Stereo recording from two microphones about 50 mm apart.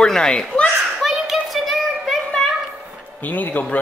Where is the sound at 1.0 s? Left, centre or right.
Centre.